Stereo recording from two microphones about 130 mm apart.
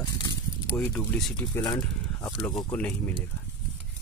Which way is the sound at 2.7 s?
10° left (ahead or behind).